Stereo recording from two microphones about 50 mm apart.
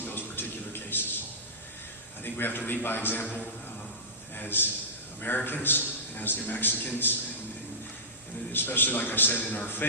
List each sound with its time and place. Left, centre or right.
0.0 s a sound: left
2.2 s a man's voice: left
3.2 s a man's voice: left
4.4 s a man's voice: left
8.5 s a man's voice: left